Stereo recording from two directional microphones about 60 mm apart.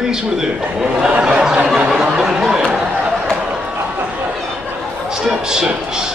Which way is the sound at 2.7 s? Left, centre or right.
Centre.